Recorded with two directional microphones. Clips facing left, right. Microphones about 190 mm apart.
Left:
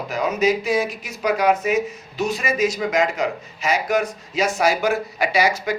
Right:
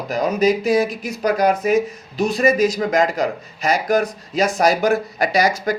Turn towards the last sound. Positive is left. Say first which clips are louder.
# right 2 dB
turn(degrees=-40)  # may be behind; listen again after turning